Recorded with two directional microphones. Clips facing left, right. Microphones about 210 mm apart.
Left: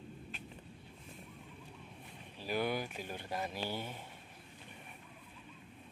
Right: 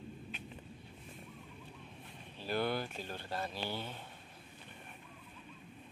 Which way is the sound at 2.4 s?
10° left (ahead or behind).